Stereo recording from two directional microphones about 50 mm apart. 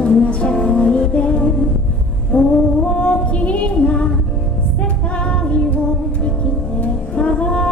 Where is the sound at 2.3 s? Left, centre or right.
Left.